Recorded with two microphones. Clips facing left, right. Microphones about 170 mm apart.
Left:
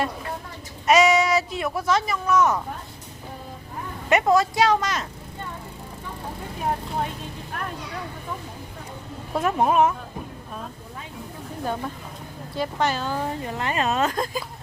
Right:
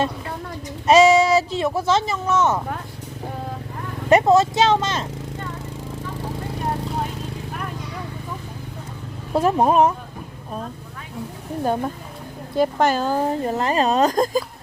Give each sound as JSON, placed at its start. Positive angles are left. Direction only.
{"t": 0.9, "sound": "speech", "side_deg": -30}
{"t": 4.1, "sound": "speech", "side_deg": -25}
{"t": 9.3, "sound": "speech", "side_deg": -30}
{"t": 11.6, "sound": "speech", "side_deg": -40}